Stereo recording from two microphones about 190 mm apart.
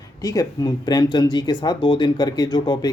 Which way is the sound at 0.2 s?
20° left (ahead or behind).